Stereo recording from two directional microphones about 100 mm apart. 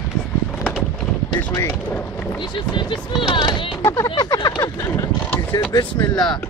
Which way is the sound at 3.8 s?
25° left (ahead or behind).